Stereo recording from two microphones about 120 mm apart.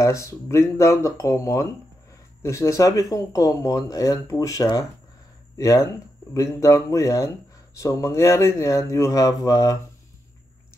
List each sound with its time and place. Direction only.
0.0 s speech: 25° left (ahead or behind)